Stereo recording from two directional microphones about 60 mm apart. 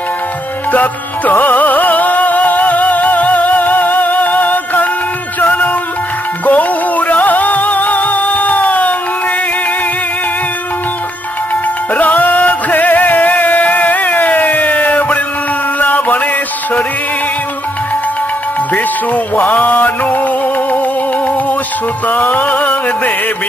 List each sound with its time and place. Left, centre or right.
0.7 s music: left
11.9 s music: left
18.7 s music: left
22.0 s music: left